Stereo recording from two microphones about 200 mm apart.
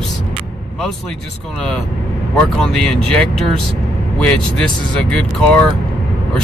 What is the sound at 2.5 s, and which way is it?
Speech, 5° left (ahead or behind).